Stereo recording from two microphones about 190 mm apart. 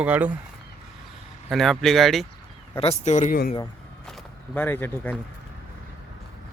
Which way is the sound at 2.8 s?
35° left (ahead or behind).